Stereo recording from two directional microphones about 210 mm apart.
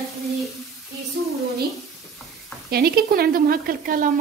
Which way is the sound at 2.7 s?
45° right (ahead or behind).